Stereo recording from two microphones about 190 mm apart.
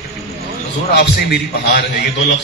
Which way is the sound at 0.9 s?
60° left (ahead or behind).